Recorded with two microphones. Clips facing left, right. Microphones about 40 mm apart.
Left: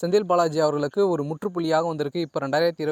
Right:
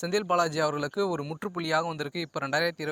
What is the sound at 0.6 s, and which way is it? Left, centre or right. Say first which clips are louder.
Speech: left 6 dB; centre.